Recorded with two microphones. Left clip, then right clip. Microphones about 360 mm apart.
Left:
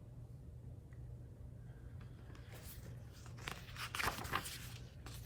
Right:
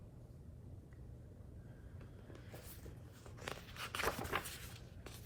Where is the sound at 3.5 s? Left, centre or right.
Centre.